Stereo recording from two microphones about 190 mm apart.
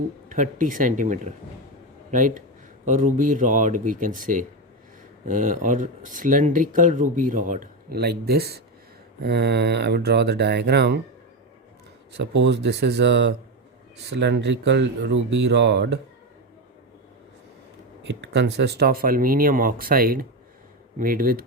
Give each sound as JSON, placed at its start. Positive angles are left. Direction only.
{"t": 0.3, "sound": "speech", "side_deg": -40}
{"t": 12.1, "sound": "speech", "side_deg": -65}
{"t": 18.0, "sound": "speech", "side_deg": -65}